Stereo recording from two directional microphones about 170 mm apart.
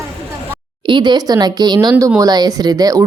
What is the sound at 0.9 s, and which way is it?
Speech, 25° right (ahead or behind).